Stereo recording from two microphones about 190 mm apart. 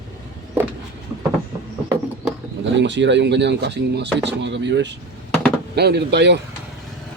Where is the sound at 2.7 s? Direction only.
70° right (ahead or behind).